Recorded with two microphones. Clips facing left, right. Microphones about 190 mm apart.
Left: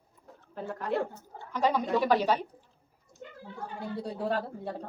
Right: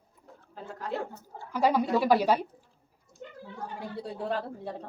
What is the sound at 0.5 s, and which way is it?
Speech, 60° left (ahead or behind).